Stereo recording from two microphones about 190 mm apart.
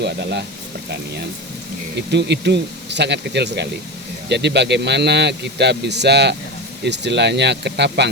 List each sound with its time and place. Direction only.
0.0 s speech: 60° right (ahead or behind)
2.0 s speech: 65° right (ahead or behind)